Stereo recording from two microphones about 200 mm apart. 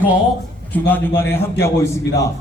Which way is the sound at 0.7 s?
10° left (ahead or behind).